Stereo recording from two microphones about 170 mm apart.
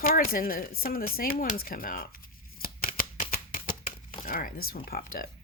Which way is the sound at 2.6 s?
55° left (ahead or behind).